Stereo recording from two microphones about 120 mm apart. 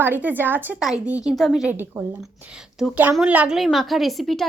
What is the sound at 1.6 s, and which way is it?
Speech, 15° right (ahead or behind).